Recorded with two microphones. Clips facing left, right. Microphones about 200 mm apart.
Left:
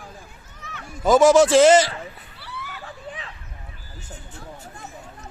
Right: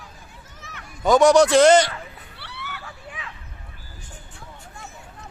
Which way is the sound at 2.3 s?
75° right (ahead or behind).